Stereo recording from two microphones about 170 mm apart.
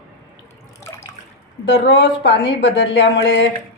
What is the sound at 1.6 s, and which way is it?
Speech, 90° left.